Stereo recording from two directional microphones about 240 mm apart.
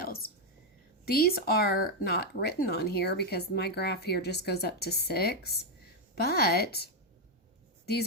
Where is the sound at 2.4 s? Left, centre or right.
Left.